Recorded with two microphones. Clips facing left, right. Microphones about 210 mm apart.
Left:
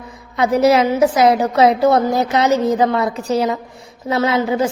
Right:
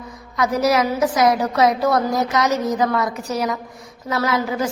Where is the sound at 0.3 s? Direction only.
25° left (ahead or behind).